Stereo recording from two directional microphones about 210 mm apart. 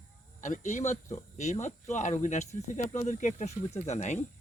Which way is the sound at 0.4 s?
35° left (ahead or behind).